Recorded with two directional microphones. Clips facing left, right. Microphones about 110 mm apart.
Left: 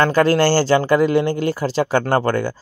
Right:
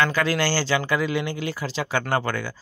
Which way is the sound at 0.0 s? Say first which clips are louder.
Left 8 dB; 45° left (ahead or behind).